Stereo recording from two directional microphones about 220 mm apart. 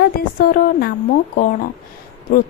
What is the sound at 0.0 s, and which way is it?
A woman's voice, 45° left (ahead or behind).